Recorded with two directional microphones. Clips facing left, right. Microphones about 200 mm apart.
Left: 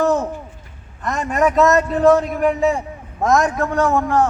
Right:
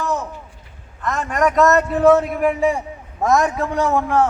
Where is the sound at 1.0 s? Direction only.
10° left (ahead or behind); by 4.3 s 10° right (ahead or behind).